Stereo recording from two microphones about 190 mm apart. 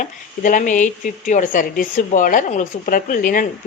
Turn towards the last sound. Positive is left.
turn(degrees=45)  # may be behind; listen again after turning